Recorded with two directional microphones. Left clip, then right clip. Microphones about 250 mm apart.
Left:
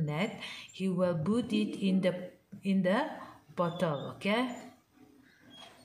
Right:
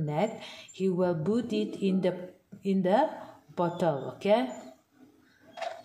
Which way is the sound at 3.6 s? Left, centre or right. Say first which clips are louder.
Right 4 dB; centre.